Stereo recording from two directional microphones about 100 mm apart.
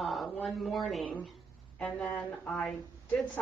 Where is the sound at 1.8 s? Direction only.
15° left (ahead or behind).